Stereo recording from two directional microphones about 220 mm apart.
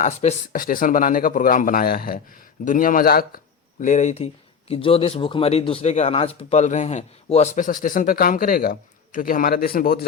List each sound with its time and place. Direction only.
0.0 s speech: 30° left (ahead or behind)